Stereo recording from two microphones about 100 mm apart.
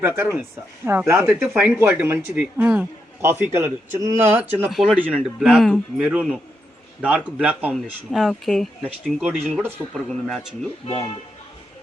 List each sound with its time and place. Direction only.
0.0 s speech: 25° right (ahead or behind)
1.3 s speech: 10° right (ahead or behind)
1.6 s speech: 20° right (ahead or behind)
3.2 s speech: 25° right (ahead or behind)
4.7 s speech: centre (ahead or behind)
7.7 s speech: centre (ahead or behind)
9.6 s speech: 20° right (ahead or behind)
9.9 s speech: 5° left (ahead or behind)
10.8 s speech: 75° left (ahead or behind)